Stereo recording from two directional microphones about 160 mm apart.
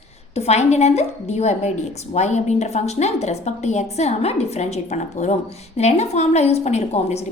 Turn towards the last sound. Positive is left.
turn(degrees=45)  # may be behind; listen again after turning